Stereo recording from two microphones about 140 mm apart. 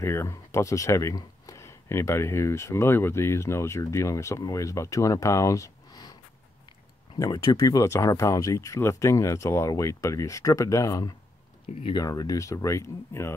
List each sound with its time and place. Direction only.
0.0 s speech: 20° left (ahead or behind)
7.2 s speech: 25° left (ahead or behind)
11.7 s speech: 50° left (ahead or behind)
12.0 s speech: 25° left (ahead or behind)